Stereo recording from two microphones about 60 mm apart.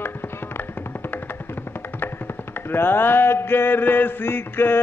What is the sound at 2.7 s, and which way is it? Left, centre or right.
Mantra, left.